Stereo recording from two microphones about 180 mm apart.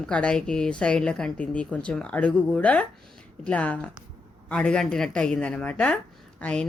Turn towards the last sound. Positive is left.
turn(degrees=5)  # may be behind; listen again after turning